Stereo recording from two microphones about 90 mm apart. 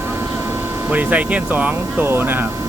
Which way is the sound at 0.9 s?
15° right (ahead or behind).